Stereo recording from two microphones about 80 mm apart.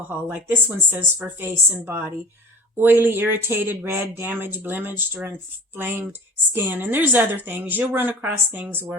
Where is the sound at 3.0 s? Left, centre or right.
Right.